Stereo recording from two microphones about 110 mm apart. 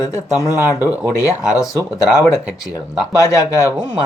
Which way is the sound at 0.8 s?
10° right (ahead or behind).